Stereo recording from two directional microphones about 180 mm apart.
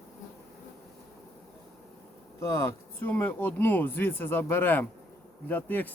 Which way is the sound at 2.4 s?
15° left (ahead or behind).